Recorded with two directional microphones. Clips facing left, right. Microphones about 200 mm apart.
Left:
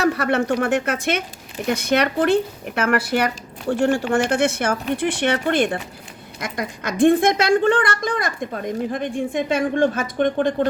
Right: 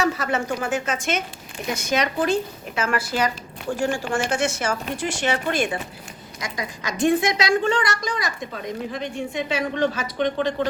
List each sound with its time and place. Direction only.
0.0 s a woman's voice: 60° left (ahead or behind)